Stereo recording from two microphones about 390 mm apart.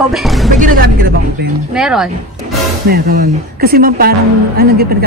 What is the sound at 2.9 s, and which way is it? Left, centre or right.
Speech, right.